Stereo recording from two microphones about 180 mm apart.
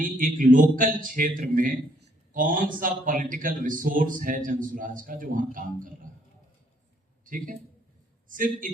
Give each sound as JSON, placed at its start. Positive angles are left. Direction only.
{"t": 0.0, "sound": "a man's voice", "side_deg": -50}
{"t": 7.3, "sound": "a man's voice", "side_deg": -50}